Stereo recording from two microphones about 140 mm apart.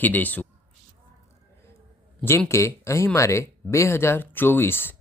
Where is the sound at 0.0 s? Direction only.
10° left (ahead or behind).